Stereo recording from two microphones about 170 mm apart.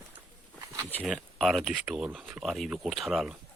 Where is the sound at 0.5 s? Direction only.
10° right (ahead or behind).